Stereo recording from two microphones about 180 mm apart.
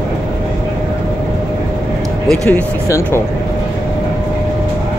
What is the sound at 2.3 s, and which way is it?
Speech, 5° left (ahead or behind).